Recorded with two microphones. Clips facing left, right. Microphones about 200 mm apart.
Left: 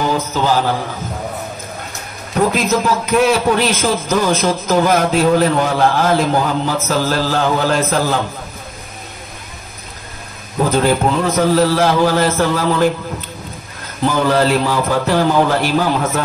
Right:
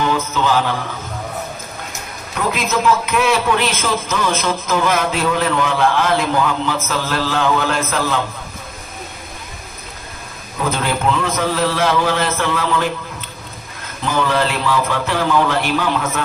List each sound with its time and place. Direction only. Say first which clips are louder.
0.0 s mantra: left 1 dB; 40° left (ahead or behind)
2.3 s a man's voice: left 5 dB; 40° left (ahead or behind)
10.7 s a man's voice: left 4 dB; 40° left (ahead or behind)
14.0 s a man's voice: left 4 dB; 40° left (ahead or behind)